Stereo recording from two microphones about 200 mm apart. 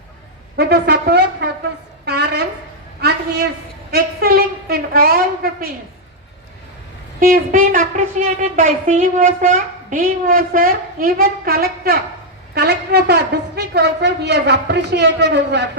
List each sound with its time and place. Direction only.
0.5 s a woman's voice: 55° right (ahead or behind)
2.0 s a sound: 55° right (ahead or behind)
7.2 s a woman's voice: 45° right (ahead or behind)